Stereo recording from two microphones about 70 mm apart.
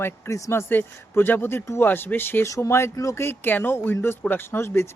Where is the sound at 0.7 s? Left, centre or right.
Left.